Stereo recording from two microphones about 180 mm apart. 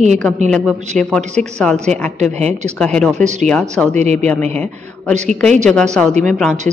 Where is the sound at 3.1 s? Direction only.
40° right (ahead or behind).